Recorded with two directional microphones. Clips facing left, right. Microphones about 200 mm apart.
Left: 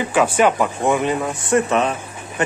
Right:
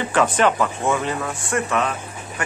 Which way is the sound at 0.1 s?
10° left (ahead or behind).